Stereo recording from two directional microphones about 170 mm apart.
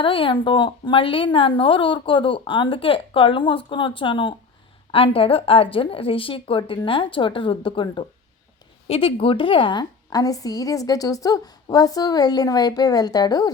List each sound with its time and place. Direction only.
0.0 s a woman's voice: 30° left (ahead or behind)